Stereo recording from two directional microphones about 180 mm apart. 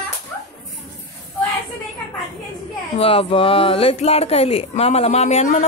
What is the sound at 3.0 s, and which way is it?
Speech, 30° left (ahead or behind).